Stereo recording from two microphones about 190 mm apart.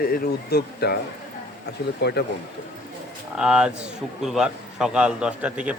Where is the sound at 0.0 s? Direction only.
50° left (ahead or behind).